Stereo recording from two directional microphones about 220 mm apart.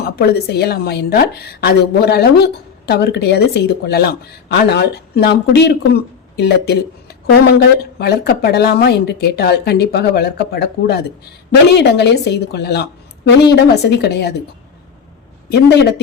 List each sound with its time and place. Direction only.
0.0 s a woman's voice: 45° left (ahead or behind)
15.4 s a woman's voice: 45° left (ahead or behind)